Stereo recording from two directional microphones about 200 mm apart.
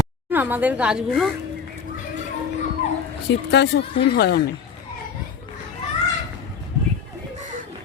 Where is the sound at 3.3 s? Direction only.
60° left (ahead or behind).